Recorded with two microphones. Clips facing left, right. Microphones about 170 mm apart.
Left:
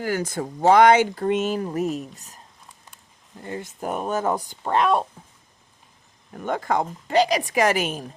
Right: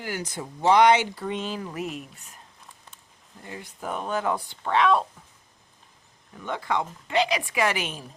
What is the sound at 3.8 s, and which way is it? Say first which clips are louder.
Speech: left 3 dB; 45° left (ahead or behind).